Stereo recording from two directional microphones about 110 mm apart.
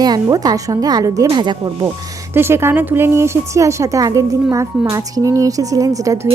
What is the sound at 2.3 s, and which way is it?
A woman's voice, 20° right (ahead or behind).